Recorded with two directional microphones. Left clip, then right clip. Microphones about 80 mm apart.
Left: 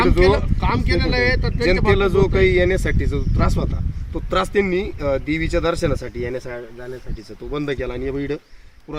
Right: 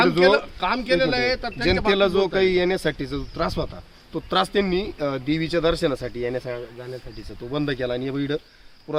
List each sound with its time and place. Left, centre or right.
0.0 s speech: right